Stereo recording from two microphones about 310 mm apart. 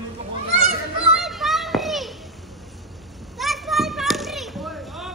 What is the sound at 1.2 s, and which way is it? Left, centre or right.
Children playing, centre.